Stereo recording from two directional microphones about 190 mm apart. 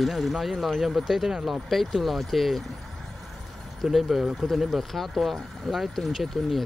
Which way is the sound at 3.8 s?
Centre (ahead or behind).